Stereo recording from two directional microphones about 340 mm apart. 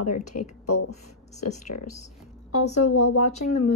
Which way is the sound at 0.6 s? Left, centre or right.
Left.